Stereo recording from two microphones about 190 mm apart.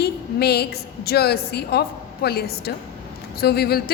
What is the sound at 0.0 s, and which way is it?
A woman's voice, 60° left (ahead or behind).